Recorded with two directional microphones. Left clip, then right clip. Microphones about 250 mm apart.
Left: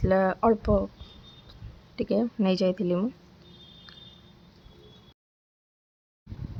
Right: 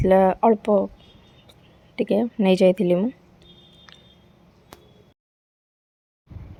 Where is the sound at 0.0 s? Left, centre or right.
Centre.